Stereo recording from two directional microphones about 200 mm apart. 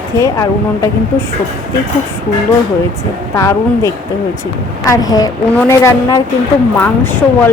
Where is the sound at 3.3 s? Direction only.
15° left (ahead or behind).